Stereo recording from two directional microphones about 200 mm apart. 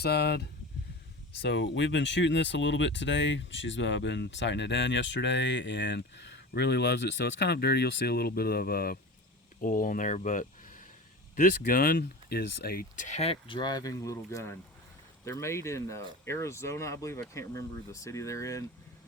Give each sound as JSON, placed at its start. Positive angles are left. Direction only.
{"t": 0.0, "sound": "speech", "side_deg": 55}